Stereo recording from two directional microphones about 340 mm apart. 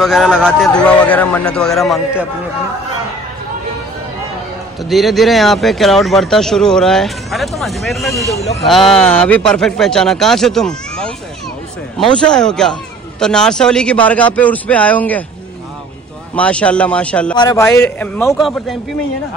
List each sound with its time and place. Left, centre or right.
0.0 s speech: centre
4.8 s speech: centre
8.4 s speech: centre
8.6 s speech: centre
16.3 s speech: centre